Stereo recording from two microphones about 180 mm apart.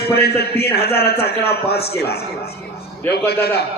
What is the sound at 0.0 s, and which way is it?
A man's voice, 60° left (ahead or behind).